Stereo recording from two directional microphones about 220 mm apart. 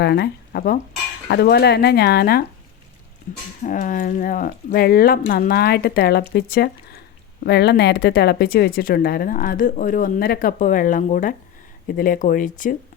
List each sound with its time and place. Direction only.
0.0 s speech: 45° left (ahead or behind)
3.6 s speech: 35° left (ahead or behind)